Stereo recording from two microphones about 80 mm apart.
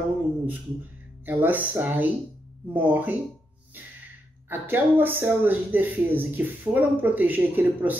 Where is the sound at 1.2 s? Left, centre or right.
Right.